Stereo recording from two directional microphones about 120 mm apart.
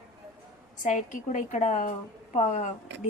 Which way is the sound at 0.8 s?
90° left.